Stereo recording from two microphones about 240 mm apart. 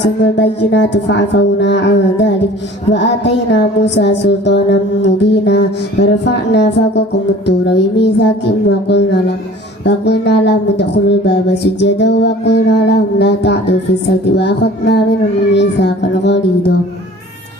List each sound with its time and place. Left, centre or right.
0.0 s music: left